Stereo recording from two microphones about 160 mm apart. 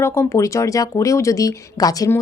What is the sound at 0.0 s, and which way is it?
Speech, 15° left (ahead or behind).